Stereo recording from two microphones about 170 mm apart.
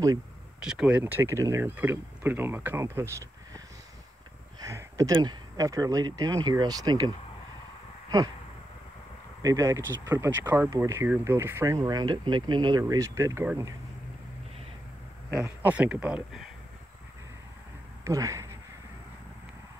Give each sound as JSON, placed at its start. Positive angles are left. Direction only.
{"t": 0.7, "sound": "speech", "side_deg": -5}
{"t": 4.6, "sound": "a sound", "side_deg": -20}
{"t": 5.1, "sound": "speech", "side_deg": -25}
{"t": 9.4, "sound": "speech", "side_deg": -20}
{"t": 15.4, "sound": "speech", "side_deg": -10}
{"t": 18.0, "sound": "speech", "side_deg": -20}